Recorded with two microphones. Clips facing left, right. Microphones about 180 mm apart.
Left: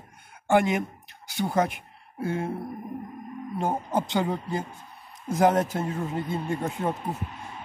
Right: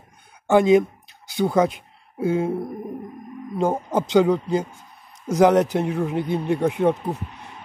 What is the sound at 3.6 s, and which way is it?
Speech, 90° right.